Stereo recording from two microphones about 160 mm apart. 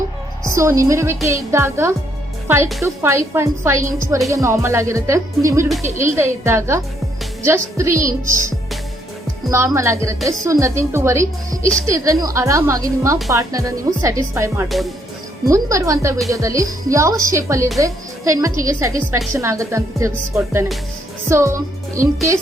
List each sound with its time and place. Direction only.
0.4 s a woman's voice: 20° right (ahead or behind)
9.5 s a woman's voice: 20° right (ahead or behind)